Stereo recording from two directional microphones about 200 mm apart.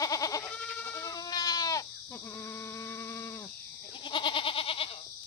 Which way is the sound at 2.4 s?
15° left (ahead or behind).